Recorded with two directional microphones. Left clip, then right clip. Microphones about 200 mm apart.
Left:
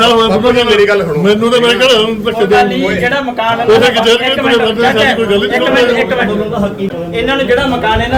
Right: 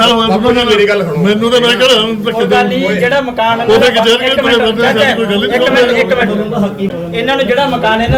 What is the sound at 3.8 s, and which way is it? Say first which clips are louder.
A man's voice: even; centre (ahead or behind).